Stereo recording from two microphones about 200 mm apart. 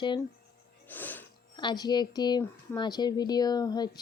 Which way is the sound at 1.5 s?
20° left (ahead or behind).